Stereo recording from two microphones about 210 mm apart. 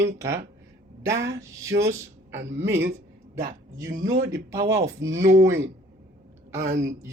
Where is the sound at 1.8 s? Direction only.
15° right (ahead or behind).